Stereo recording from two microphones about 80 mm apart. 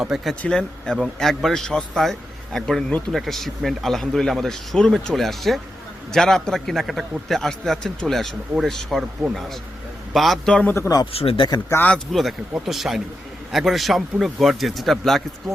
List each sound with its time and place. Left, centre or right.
0.0 s speech: centre
0.4 s a man's voice: centre
10.8 s speech: left
11.0 s speech: left
12.1 s speech: centre